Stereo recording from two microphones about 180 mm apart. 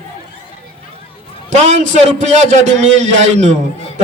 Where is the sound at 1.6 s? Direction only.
40° right (ahead or behind).